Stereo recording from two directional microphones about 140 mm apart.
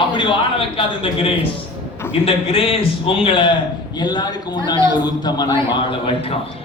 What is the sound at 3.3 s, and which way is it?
A man's voice, 35° left (ahead or behind).